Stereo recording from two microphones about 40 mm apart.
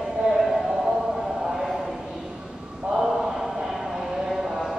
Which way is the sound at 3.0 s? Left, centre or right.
Centre.